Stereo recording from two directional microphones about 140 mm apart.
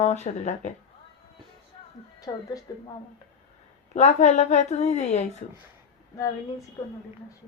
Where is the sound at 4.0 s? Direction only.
55° left (ahead or behind).